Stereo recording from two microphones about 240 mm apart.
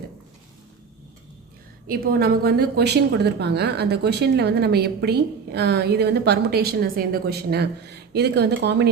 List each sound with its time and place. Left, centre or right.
1.9 s a woman's voice: right